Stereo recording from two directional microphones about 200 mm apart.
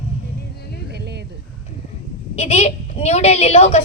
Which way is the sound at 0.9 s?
55° right (ahead or behind).